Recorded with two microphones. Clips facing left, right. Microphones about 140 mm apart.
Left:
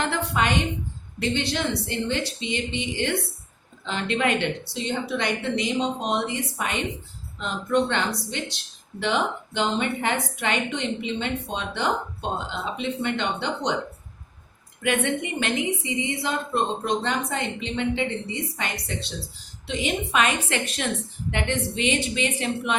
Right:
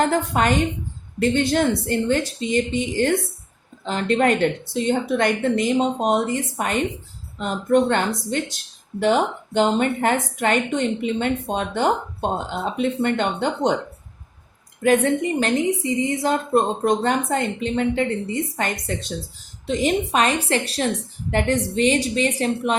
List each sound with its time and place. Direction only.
0.0 s speech: 45° right (ahead or behind)
14.8 s a woman's voice: 35° right (ahead or behind)